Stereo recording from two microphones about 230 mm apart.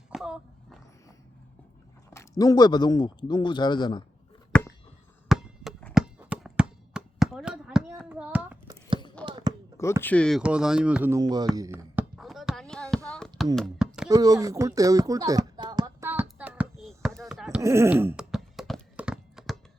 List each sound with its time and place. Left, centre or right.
0.1 s a sound: centre
2.1 s speech: centre
5.3 s chop: centre
9.2 s basketball bounce: centre
10.0 s speech: centre
11.5 s a sound: centre
14.1 s speech: centre
16.4 s a sound: centre
17.6 s clip-clop: centre